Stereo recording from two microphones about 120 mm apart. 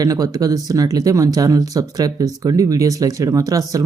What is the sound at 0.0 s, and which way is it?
Speech, 30° right (ahead or behind).